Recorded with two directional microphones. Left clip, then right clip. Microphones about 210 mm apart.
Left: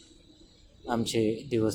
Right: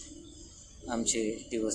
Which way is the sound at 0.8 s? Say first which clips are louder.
Left 4 dB; 5° left (ahead or behind).